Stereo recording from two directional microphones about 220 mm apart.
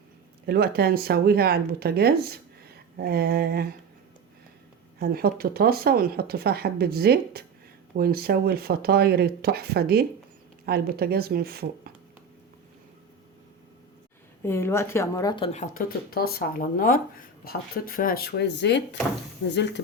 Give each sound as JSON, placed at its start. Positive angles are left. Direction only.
{"t": 0.4, "sound": "speech", "side_deg": -45}
{"t": 4.9, "sound": "speech", "side_deg": -45}
{"t": 14.4, "sound": "a woman's voice", "side_deg": 10}
{"t": 15.5, "sound": "speech", "side_deg": 35}